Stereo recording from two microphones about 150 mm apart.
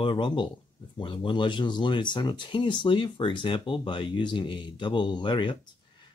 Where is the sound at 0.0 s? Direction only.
30° left (ahead or behind).